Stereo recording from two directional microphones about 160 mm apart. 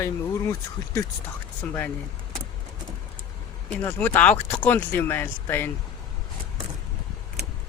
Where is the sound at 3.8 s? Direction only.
10° left (ahead or behind).